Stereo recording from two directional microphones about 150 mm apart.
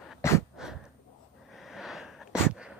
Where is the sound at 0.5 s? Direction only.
5° right (ahead or behind).